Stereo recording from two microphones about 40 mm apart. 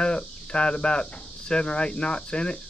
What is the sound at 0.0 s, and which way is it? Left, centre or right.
Cricket, left.